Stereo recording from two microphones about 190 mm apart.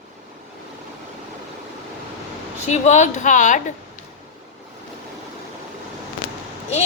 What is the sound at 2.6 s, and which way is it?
Speech, 40° left (ahead or behind).